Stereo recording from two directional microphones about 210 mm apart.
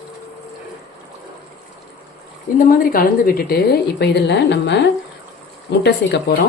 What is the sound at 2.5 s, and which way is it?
A woman's voice, 40° left (ahead or behind).